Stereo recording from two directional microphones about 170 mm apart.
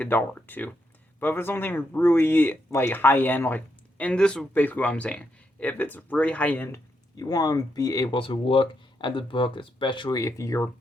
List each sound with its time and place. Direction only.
0.0 s speech: 10° left (ahead or behind)
7.2 s speech: 20° left (ahead or behind)